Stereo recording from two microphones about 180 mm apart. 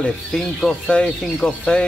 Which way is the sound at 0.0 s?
5° left (ahead or behind).